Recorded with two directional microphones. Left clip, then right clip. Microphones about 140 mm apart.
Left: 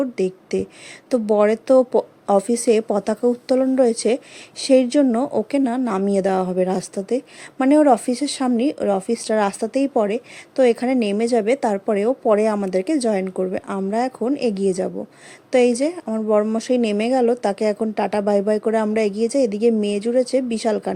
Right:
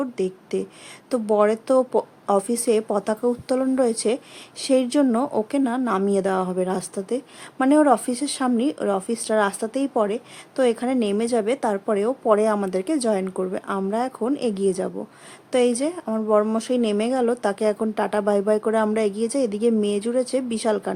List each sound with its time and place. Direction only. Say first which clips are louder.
0.0 s a woman's voice: left 4 dB; 20° left (ahead or behind)